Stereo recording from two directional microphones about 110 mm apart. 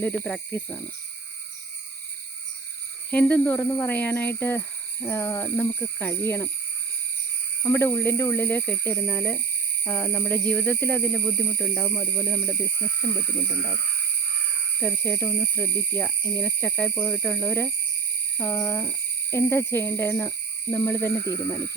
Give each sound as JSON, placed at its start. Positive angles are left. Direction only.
{"t": 0.0, "sound": "speech", "side_deg": 15}
{"t": 3.1, "sound": "speech", "side_deg": 15}
{"t": 7.6, "sound": "speech", "side_deg": 20}
{"t": 11.8, "sound": "speech", "side_deg": 25}
{"t": 12.2, "sound": "speech", "side_deg": 10}
{"t": 14.8, "sound": "speech", "side_deg": 20}